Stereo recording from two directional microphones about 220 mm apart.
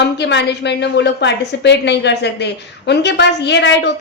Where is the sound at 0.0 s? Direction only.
50° left (ahead or behind).